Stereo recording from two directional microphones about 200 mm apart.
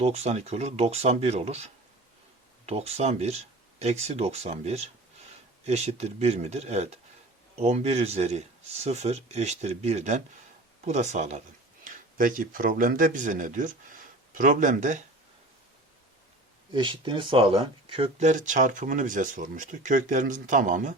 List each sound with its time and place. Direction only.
0.0 s speech: 30° right (ahead or behind)
16.7 s speech: 25° right (ahead or behind); by 20.9 s 40° right (ahead or behind)